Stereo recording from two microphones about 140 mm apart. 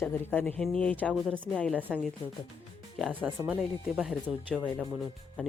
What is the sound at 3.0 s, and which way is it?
Speech, centre (ahead or behind).